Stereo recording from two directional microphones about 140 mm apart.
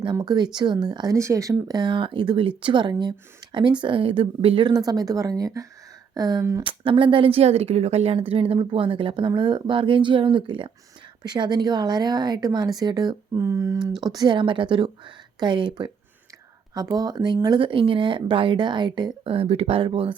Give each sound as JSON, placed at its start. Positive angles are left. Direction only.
{"t": 0.0, "sound": "speech", "side_deg": -30}
{"t": 4.9, "sound": "speech", "side_deg": -25}